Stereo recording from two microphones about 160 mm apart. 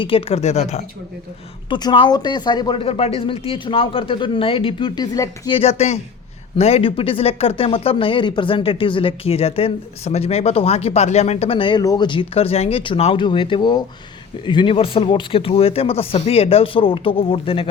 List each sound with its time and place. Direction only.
0.0 s speech: 35° left (ahead or behind)
1.7 s speech: 30° left (ahead or behind)
5.5 s speech: 40° left (ahead or behind)